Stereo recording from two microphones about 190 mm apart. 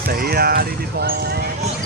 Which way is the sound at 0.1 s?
50° right (ahead or behind).